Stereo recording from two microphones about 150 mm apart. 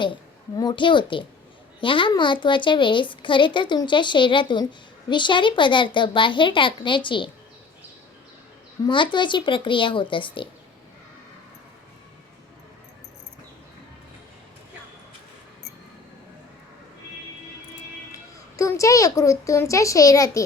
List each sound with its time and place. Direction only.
0.0 s a woman's voice: 30° left (ahead or behind)
8.9 s a woman's voice: 30° left (ahead or behind)
18.5 s a child's voice: 20° left (ahead or behind)